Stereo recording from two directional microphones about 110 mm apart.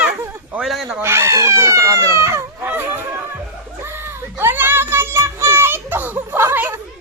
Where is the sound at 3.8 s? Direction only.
20° right (ahead or behind).